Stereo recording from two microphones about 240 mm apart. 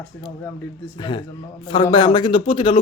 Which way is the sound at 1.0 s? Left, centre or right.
Left.